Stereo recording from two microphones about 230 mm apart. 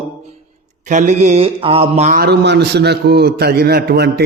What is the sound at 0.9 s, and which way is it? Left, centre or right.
A man's voice, right.